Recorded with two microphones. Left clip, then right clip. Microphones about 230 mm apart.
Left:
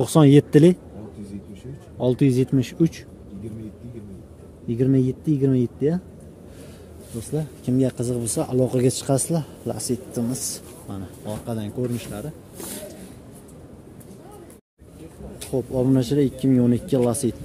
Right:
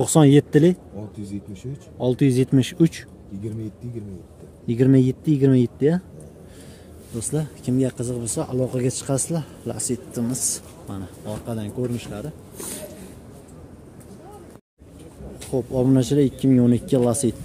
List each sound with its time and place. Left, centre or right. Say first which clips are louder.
0.0 s speech: even; centre
2.0 s speech: even; centre
4.6 s speech: right 3 dB; centre
7.2 s speech: right 1 dB; centre
7.6 s speech: left 2 dB; centre
15.5 s speech: right 1 dB; centre